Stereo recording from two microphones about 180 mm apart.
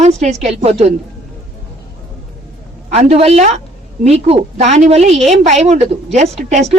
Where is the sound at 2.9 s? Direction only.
35° right (ahead or behind).